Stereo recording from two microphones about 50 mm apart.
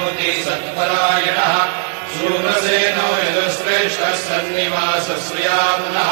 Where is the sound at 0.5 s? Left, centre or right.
Left.